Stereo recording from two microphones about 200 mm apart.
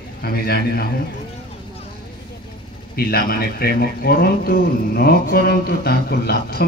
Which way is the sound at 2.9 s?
50° left (ahead or behind).